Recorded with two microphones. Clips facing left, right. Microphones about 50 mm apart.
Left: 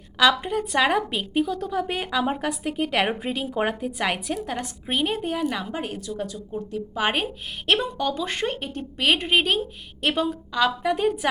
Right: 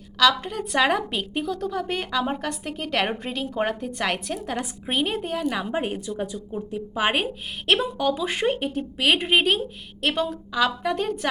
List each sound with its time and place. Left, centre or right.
0.2 s a woman's voice: centre
0.5 s a woman's voice: centre
5.7 s a woman's voice: right; by 11.3 s centre